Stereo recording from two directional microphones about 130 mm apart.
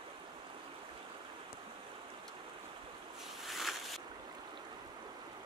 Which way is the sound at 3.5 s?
Centre (ahead or behind).